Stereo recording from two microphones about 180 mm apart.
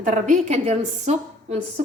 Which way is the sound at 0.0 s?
45° right (ahead or behind).